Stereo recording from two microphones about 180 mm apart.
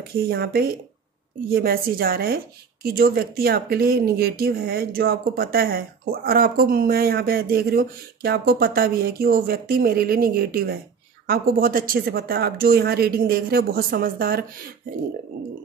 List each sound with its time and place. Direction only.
0.3 s a woman's voice: 60° right (ahead or behind)